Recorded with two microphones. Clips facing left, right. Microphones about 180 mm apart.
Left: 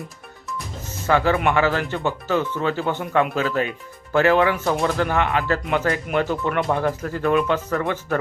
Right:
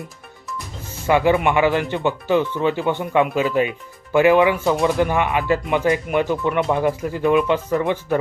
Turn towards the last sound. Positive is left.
turn(degrees=-15)  # may be behind; listen again after turning